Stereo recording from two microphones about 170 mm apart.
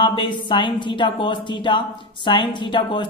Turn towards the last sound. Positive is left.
turn(degrees=30)  # may be behind; listen again after turning